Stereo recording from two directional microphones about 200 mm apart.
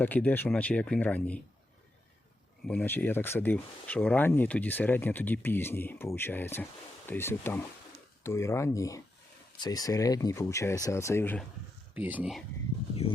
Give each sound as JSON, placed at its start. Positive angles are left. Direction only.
{"t": 0.0, "sound": "speech", "side_deg": 10}
{"t": 2.6, "sound": "speech", "side_deg": 10}
{"t": 11.9, "sound": "speech", "side_deg": -10}